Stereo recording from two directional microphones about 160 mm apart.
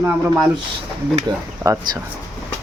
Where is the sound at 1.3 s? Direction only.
25° right (ahead or behind).